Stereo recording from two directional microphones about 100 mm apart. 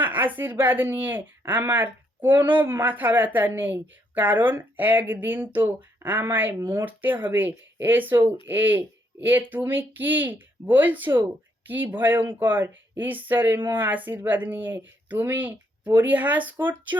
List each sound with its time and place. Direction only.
0.0 s speech: 15° right (ahead or behind)